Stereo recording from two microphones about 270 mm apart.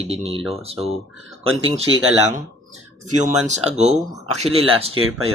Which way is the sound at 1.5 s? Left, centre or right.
Right.